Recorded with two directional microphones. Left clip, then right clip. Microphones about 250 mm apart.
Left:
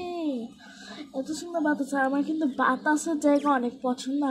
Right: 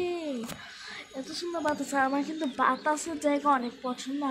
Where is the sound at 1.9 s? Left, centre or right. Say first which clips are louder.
Left 2 dB; right; by 4.3 s centre.